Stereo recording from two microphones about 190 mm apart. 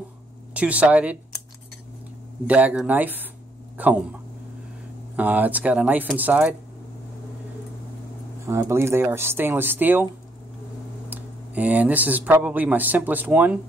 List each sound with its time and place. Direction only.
0.6 s speech: 5° right (ahead or behind)
2.4 s speech: 10° right (ahead or behind)
5.1 s speech: 10° right (ahead or behind)
8.5 s speech: 15° right (ahead or behind)
11.1 s speech: 10° right (ahead or behind)